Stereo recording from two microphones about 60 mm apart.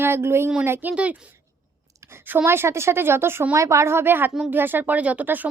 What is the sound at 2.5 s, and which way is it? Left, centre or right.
A woman's voice, right.